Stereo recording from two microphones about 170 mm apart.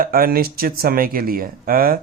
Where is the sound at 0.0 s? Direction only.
60° right (ahead or behind).